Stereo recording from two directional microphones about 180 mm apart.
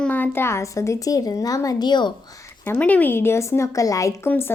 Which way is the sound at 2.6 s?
10° left (ahead or behind).